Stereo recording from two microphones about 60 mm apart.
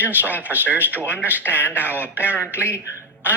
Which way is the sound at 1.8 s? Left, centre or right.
Right.